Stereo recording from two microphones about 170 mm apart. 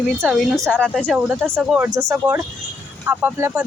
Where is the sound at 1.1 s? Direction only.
5° right (ahead or behind).